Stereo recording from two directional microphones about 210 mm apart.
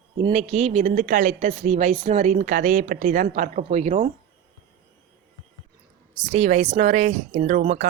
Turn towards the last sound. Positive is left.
turn(degrees=-35)  # may be behind; listen again after turning